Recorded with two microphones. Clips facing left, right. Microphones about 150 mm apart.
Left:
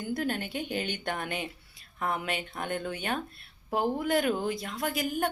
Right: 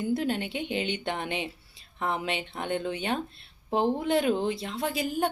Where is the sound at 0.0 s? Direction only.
25° right (ahead or behind).